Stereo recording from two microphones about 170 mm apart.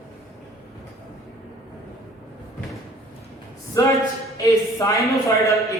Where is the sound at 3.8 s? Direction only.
20° left (ahead or behind).